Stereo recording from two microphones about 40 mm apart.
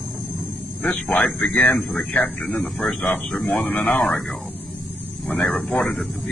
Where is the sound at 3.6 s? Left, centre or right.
Left.